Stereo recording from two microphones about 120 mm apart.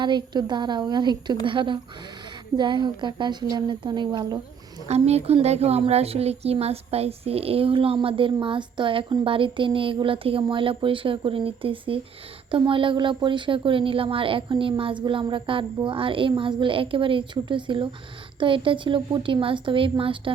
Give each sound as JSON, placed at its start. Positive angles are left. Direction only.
{"t": 0.0, "sound": "a woman's voice", "side_deg": -40}
{"t": 4.9, "sound": "a woman's voice", "side_deg": -60}